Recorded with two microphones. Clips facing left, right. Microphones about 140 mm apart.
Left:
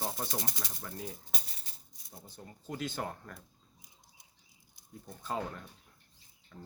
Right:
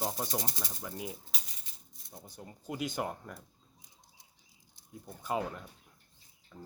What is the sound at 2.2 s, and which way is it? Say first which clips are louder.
Speech: right 2 dB; 15° right (ahead or behind).